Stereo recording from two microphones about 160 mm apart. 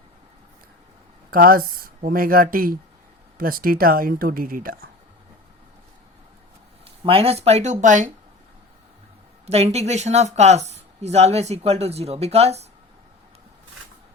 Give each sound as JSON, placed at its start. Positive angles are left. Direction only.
{"t": 1.3, "sound": "speech", "side_deg": -65}
{"t": 6.8, "sound": "speech", "side_deg": -35}
{"t": 9.5, "sound": "speech", "side_deg": -40}